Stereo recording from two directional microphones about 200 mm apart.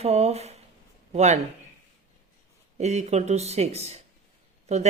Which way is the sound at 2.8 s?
35° right (ahead or behind).